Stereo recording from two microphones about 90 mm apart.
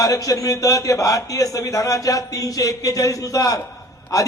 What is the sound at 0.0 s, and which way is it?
A man's voice, 40° left (ahead or behind).